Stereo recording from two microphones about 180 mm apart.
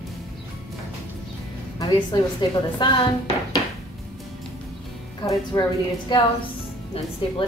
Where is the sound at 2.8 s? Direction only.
25° left (ahead or behind).